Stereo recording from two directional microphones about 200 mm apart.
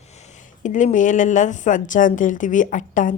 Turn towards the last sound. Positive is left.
turn(degrees=40)  # may be behind; listen again after turning